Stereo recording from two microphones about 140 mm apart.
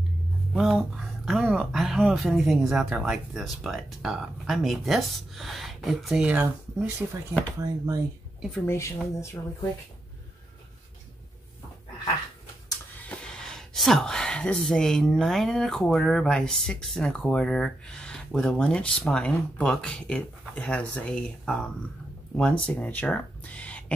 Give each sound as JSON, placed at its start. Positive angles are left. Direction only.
{"t": 0.5, "sound": "speech", "side_deg": 0}
{"t": 7.6, "sound": "speech", "side_deg": -25}
{"t": 8.6, "sound": "speech", "side_deg": 20}
{"t": 13.1, "sound": "speech", "side_deg": 5}